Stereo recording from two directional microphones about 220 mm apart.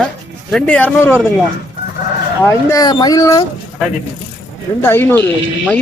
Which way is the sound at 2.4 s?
15° left (ahead or behind).